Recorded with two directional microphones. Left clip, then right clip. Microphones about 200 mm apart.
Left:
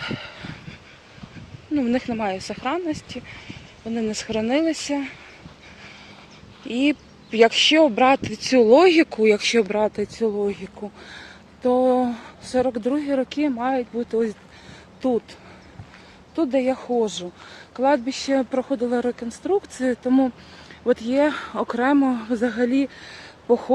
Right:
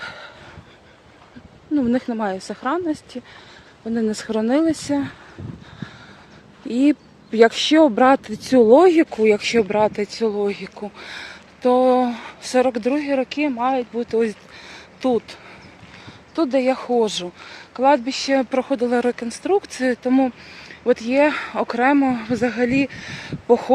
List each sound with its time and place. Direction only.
0.0 s dog: 15° right (ahead or behind)
1.7 s speech: 20° right (ahead or behind)
6.7 s speech: 30° right (ahead or behind)
9.0 s speech: centre (ahead or behind)